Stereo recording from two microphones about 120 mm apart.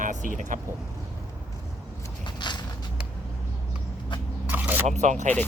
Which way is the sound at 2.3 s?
40° left (ahead or behind).